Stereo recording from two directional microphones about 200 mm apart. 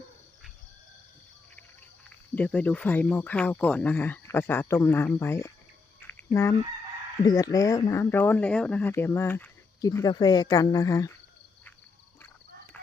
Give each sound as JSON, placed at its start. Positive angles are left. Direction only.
{"t": 2.0, "sound": "speech", "side_deg": 5}
{"t": 6.0, "sound": "a sound", "side_deg": 10}
{"t": 7.3, "sound": "speech", "side_deg": 20}